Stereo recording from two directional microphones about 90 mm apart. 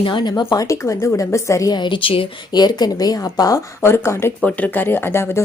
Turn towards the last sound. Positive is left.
turn(degrees=30)  # may be behind; listen again after turning